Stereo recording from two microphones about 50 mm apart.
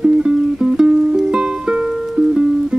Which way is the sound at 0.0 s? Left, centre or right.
Centre.